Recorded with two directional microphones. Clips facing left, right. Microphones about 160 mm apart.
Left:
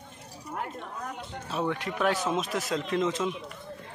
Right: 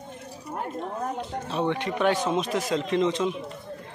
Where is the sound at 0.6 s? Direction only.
35° right (ahead or behind).